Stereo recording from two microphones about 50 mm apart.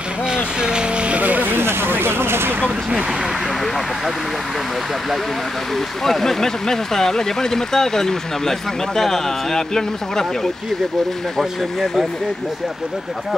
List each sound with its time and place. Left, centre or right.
0.3 s vehicle: centre; by 1.6 s right
1.6 s a sound: right
6.0 s speech: centre